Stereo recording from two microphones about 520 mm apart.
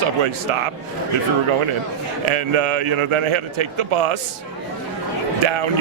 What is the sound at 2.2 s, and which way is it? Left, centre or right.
Speech, right.